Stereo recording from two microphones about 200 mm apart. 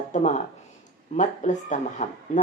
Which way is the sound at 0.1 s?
35° left (ahead or behind).